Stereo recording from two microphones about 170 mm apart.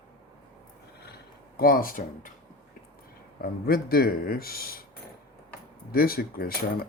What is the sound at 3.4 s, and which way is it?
Speech, 65° left (ahead or behind).